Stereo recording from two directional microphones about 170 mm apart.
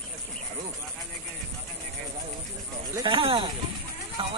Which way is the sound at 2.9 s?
25° right (ahead or behind).